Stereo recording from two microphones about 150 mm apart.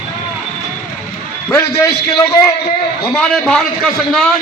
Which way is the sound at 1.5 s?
20° left (ahead or behind).